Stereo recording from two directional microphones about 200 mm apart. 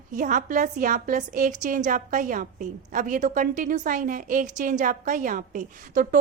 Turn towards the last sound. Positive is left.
turn(degrees=-40)  # may be behind; listen again after turning